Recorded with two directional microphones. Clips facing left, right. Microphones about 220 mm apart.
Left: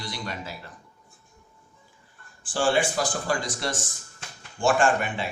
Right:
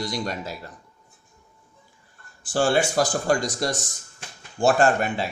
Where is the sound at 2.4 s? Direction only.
40° right (ahead or behind).